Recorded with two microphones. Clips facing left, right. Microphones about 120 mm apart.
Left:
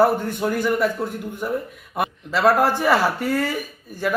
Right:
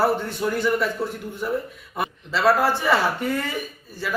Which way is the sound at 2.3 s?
15° left (ahead or behind).